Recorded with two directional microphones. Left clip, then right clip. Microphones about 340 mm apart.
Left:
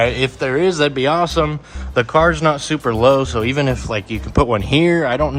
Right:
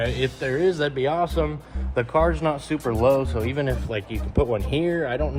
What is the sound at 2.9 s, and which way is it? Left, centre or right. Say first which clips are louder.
Speech: left 7 dB; left.